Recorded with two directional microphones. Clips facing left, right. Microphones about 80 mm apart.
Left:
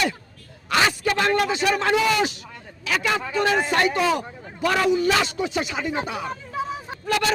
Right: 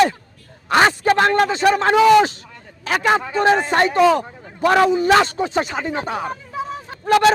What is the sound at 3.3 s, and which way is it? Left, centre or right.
A man's voice, right.